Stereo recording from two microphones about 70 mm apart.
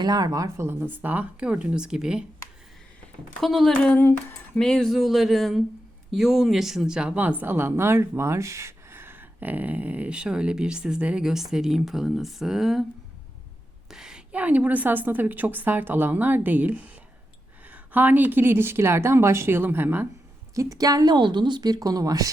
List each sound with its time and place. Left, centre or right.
0.0 s a woman's voice: right
0.5 s a woman's voice: right; by 2.2 s centre
3.4 s speech: centre
3.7 s a sound: centre
3.9 s speech: left
4.5 s a woman's voice: centre
13.9 s a sound: centre
14.3 s a woman's voice: right
20.6 s a woman's voice: right